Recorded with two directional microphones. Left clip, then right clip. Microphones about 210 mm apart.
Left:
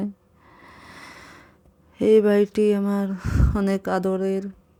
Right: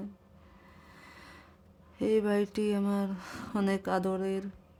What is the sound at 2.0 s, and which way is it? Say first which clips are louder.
Speech: left 12 dB; 25° left (ahead or behind).